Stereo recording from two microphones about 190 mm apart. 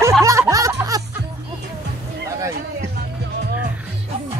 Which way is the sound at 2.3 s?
15° right (ahead or behind).